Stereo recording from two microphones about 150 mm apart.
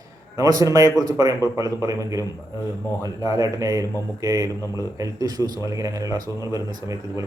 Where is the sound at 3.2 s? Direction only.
20° right (ahead or behind).